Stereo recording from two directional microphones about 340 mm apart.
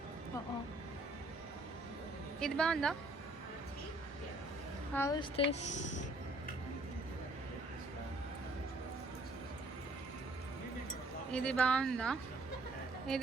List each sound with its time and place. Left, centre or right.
2.4 s speech: centre
4.9 s a woman's voice: centre
11.3 s speech: centre